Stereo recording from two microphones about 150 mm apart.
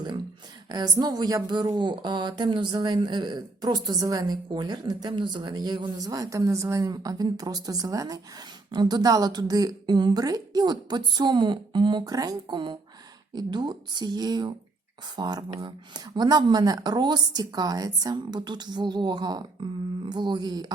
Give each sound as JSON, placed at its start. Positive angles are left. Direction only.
{"t": 0.7, "sound": "a woman's voice", "side_deg": -25}